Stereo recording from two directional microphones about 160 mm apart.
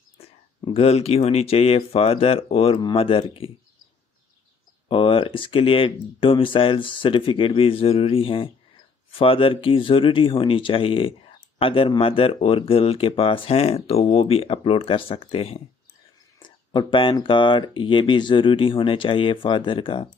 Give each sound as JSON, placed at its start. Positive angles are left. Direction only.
{"t": 0.6, "sound": "speech", "side_deg": 35}
{"t": 4.8, "sound": "speech", "side_deg": 35}